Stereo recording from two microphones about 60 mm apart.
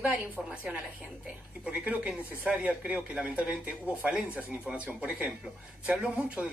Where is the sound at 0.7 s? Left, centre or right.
Right.